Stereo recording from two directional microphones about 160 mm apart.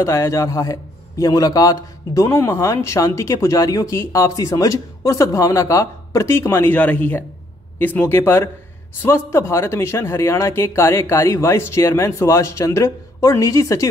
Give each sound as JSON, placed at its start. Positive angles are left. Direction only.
{"t": 0.0, "sound": "speech", "side_deg": 20}